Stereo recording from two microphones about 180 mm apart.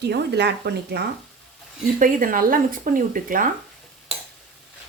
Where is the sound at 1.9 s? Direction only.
50° right (ahead or behind).